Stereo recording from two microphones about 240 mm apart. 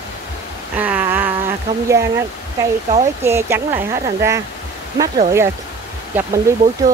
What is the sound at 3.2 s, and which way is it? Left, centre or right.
Speech, centre.